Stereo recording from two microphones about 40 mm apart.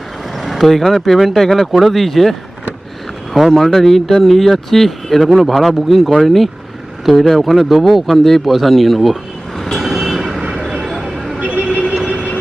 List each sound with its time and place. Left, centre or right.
0.3 s a man's voice: centre
3.3 s a man's voice: centre
9.6 s vehicle: centre
10.5 s a sound: centre
11.3 s vehicle: right